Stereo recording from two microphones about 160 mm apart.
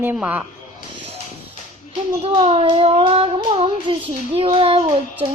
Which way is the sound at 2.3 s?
30° right (ahead or behind).